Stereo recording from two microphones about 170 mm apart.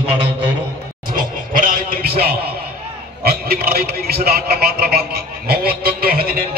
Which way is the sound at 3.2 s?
65° right (ahead or behind).